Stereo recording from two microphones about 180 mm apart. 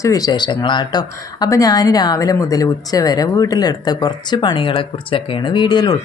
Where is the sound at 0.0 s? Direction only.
20° left (ahead or behind).